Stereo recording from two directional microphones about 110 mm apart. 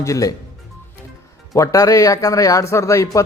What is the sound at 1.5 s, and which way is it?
Speech, 30° left (ahead or behind).